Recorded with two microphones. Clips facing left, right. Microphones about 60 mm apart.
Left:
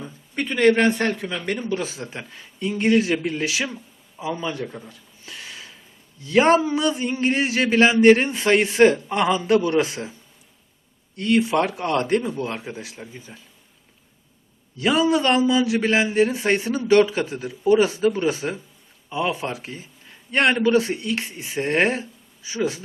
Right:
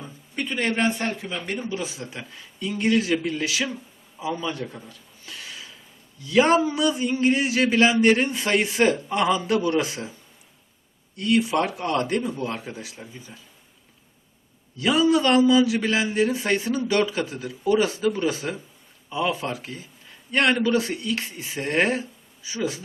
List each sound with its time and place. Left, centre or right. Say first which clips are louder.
0.5 s speech: left 7 dB; left
1.4 s speech: left 3 dB; centre
1.7 s speech: left 4 dB; left
2.0 s speech: left 2 dB; left
4.5 s a sound: left 3 dB; centre; by 5.7 s left
6.2 s a man's voice: left 2 dB; left
11.2 s a man's voice: left 2 dB; left
12.5 s speech: left 1 dB; left
14.8 s a man's voice: even; left